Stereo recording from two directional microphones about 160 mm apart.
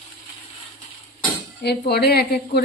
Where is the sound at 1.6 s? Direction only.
90° left.